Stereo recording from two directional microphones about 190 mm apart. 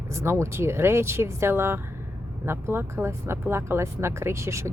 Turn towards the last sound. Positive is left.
turn(degrees=-15)  # may be behind; listen again after turning